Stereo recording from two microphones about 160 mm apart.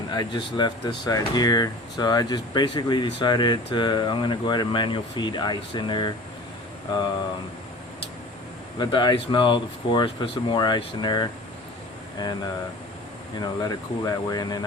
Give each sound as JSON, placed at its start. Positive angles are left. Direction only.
{"t": 0.1, "sound": "speech", "side_deg": 25}
{"t": 8.8, "sound": "speech", "side_deg": 25}
{"t": 13.4, "sound": "speech", "side_deg": 25}